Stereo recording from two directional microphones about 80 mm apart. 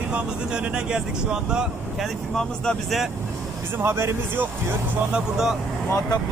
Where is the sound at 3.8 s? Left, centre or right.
Right.